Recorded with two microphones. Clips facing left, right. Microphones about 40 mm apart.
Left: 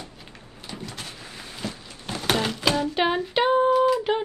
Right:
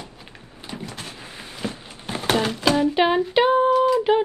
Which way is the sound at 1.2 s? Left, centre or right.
Right.